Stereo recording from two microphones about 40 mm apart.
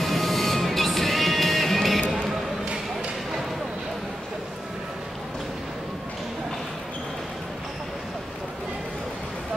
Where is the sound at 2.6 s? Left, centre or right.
Centre.